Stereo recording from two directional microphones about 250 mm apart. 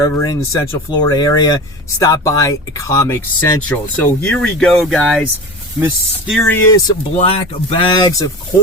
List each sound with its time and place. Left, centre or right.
0.0 s speech: centre
6.7 s speech: centre